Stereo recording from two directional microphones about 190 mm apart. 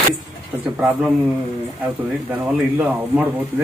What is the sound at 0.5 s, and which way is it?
Speech, 10° right (ahead or behind).